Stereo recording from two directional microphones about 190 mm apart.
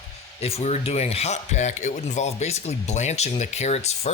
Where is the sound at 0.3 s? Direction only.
30° left (ahead or behind).